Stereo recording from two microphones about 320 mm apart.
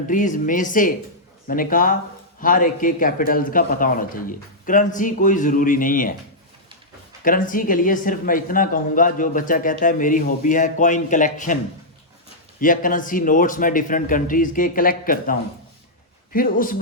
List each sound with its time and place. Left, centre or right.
0.1 s speech: left
7.3 s speech: left
12.5 s speech: left